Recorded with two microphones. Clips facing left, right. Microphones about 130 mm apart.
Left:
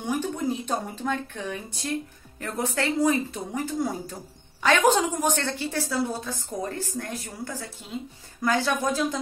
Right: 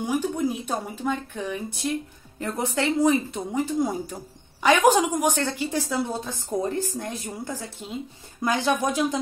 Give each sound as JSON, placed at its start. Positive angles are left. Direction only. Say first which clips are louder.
{"t": 0.0, "sound": "a woman's voice", "louder": "right 3 dB", "side_deg": -10}